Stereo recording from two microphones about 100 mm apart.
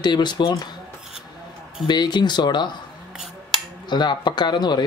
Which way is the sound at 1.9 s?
45° left (ahead or behind).